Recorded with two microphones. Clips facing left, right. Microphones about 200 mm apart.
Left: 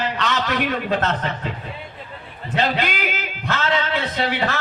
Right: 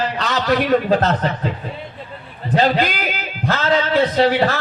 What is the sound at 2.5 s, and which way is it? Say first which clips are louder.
A man's voice: right 5 dB; 35° right (ahead or behind).